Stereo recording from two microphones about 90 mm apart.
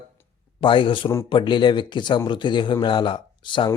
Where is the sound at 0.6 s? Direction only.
65° left (ahead or behind).